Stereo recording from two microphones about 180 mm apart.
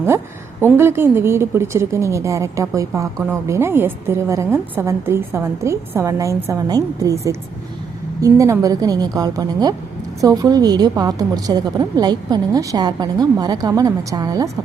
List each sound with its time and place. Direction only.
0.8 s a woman's voice: 15° right (ahead or behind)